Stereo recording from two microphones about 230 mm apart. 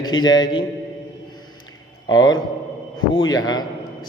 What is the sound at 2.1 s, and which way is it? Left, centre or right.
A man's voice, centre.